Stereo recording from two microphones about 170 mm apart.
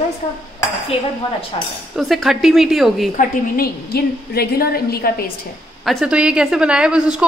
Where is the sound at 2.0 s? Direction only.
Centre (ahead or behind).